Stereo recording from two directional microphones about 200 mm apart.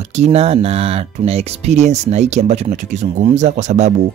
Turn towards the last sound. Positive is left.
turn(degrees=-35)  # may be behind; listen again after turning